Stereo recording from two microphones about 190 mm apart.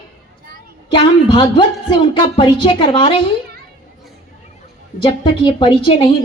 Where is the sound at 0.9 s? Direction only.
25° left (ahead or behind).